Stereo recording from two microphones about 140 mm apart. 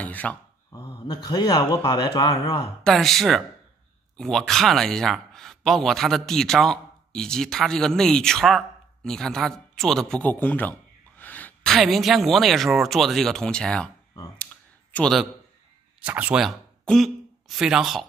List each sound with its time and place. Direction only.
0.0 s a sound: 10° left (ahead or behind)
0.7 s a man's voice: 25° left (ahead or behind)
2.8 s a man's voice: centre (ahead or behind)
14.4 s clicking: 10° left (ahead or behind)
16.0 s speech: 10° right (ahead or behind)
16.4 s speech: centre (ahead or behind)